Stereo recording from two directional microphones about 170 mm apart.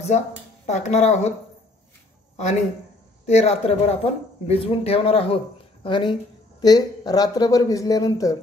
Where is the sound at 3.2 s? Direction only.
40° left (ahead or behind).